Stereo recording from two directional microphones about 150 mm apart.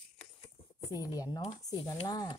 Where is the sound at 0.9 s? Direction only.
25° left (ahead or behind).